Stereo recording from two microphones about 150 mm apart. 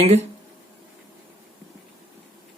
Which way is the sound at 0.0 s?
45° right (ahead or behind).